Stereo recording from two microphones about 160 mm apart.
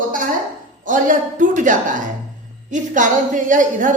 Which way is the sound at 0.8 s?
55° right (ahead or behind).